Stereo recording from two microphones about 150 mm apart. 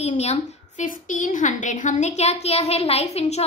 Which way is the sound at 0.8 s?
60° left (ahead or behind).